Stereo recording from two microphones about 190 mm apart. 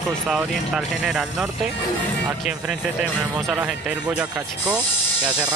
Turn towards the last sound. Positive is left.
turn(degrees=-5)  # may be behind; listen again after turning